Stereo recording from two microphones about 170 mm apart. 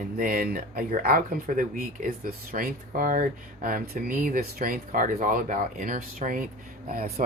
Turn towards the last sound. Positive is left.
turn(degrees=-60)  # may be behind; listen again after turning